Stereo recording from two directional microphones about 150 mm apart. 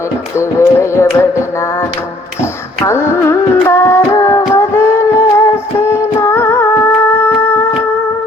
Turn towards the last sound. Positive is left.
turn(degrees=15)  # may be behind; listen again after turning